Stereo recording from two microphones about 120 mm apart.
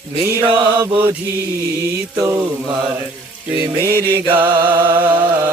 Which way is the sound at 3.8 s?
25° right (ahead or behind).